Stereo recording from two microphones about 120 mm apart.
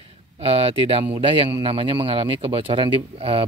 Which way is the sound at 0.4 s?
55° right (ahead or behind).